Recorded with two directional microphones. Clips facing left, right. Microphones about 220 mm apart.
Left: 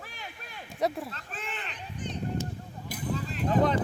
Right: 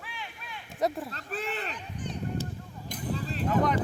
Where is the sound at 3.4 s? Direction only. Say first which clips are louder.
Left 2 dB; 30° left (ahead or behind).